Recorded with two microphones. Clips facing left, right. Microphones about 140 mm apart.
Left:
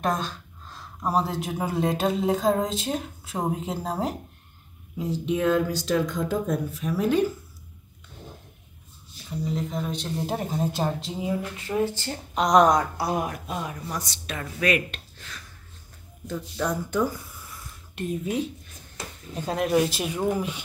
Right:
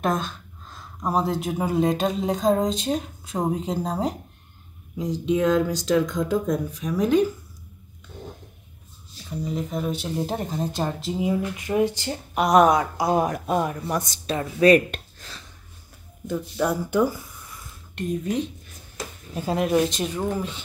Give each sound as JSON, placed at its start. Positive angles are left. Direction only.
{"t": 0.0, "sound": "speech", "side_deg": 0}
{"t": 5.3, "sound": "speech", "side_deg": 10}
{"t": 9.4, "sound": "speech", "side_deg": -5}
{"t": 13.2, "sound": "speech", "side_deg": -50}
{"t": 14.1, "sound": "speech", "side_deg": -30}
{"t": 15.2, "sound": "a sound", "side_deg": -35}
{"t": 16.3, "sound": "speech", "side_deg": -10}
{"t": 17.9, "sound": "speech", "side_deg": 5}